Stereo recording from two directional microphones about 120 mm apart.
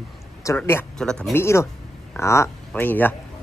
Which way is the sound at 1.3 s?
20° left (ahead or behind).